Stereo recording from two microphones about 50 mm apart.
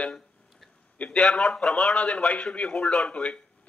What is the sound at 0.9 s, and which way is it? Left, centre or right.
Speech, left.